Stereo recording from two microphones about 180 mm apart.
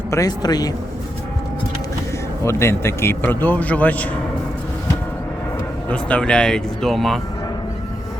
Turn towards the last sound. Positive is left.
turn(degrees=0)  # may be behind; listen again after turning